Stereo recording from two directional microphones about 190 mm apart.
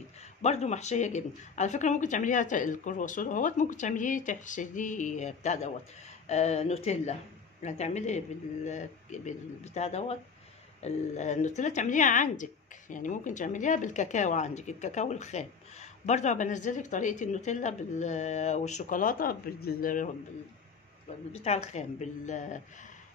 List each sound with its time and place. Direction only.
0.4 s a woman's voice: 35° left (ahead or behind)
21.3 s a woman's voice: 35° left (ahead or behind)